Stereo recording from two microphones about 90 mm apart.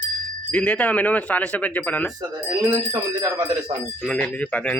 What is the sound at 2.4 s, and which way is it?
Speech, 40° right (ahead or behind).